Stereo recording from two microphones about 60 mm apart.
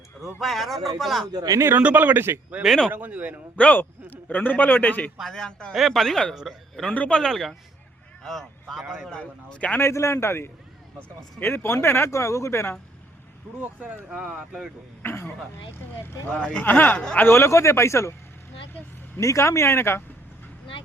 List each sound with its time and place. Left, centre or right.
0.3 s speech: centre
1.5 s speech: right
1.8 s speech: right
3.5 s a man's voice: left
5.3 s a man's voice: centre
5.7 s a man's voice: centre
9.7 s speech: left
13.6 s speech: right
14.1 s speech: centre
15.0 s speech: left
16.3 s a man's voice: centre
16.6 s a man's voice: left
17.2 s speech: left
19.1 s speech: left